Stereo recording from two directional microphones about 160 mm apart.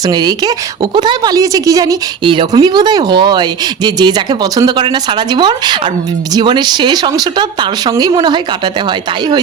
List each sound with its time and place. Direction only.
0.1 s a woman's voice: 25° right (ahead or behind)